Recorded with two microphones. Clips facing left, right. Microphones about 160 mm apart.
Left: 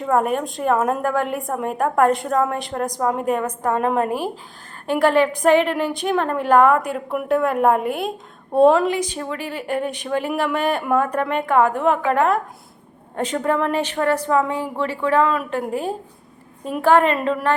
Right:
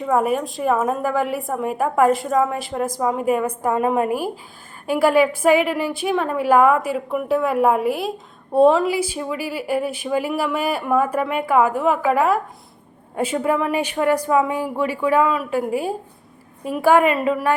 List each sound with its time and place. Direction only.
0.0 s a woman's voice: 5° right (ahead or behind)